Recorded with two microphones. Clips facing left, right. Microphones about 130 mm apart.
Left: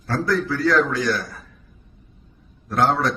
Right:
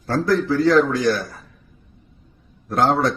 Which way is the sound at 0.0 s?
30° right (ahead or behind).